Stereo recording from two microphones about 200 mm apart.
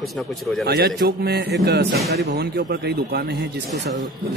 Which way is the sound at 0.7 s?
50° right (ahead or behind).